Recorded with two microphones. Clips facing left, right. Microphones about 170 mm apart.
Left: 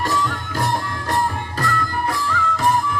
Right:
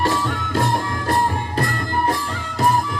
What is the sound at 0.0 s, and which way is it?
Music, 25° right (ahead or behind).